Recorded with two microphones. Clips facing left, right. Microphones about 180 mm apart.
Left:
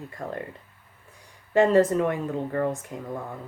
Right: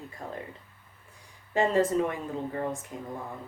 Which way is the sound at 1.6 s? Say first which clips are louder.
Left 5 dB; 65° left (ahead or behind).